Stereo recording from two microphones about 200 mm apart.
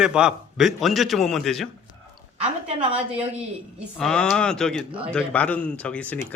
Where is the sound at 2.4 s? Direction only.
30° right (ahead or behind).